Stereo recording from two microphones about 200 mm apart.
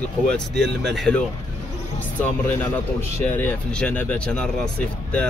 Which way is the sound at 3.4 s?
5° left (ahead or behind).